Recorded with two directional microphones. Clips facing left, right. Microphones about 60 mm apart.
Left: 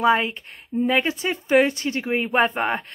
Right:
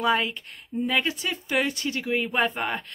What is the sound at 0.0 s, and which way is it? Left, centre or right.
Speech, left.